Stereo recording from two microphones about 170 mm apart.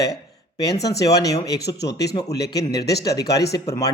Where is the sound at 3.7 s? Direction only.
20° left (ahead or behind).